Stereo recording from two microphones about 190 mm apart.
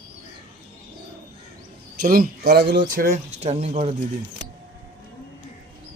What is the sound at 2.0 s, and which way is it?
Speech, 55° right (ahead or behind).